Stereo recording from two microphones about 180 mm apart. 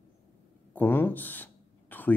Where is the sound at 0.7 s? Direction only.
10° left (ahead or behind).